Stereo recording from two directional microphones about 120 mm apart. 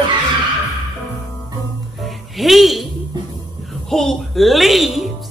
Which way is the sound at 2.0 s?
Centre (ahead or behind).